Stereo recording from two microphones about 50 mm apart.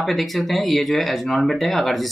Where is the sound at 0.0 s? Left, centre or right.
Centre.